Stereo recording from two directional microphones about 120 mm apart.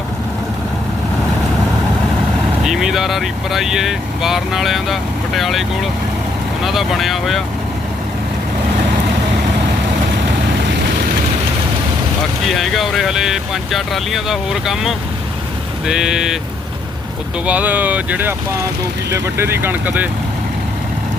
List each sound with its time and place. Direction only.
2.6 s speech: centre (ahead or behind)
12.4 s speech: centre (ahead or behind)
17.4 s speech: 10° right (ahead or behind)